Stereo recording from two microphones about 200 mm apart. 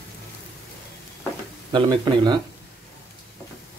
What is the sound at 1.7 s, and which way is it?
Speech, 25° right (ahead or behind).